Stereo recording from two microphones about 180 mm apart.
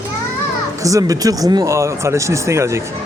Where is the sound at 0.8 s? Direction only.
20° right (ahead or behind).